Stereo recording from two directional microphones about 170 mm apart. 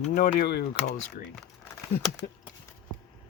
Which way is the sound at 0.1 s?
65° left (ahead or behind).